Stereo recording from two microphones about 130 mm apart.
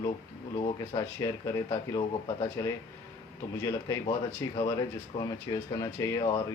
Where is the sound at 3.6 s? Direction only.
25° left (ahead or behind).